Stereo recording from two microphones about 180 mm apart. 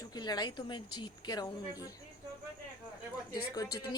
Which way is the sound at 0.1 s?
20° left (ahead or behind).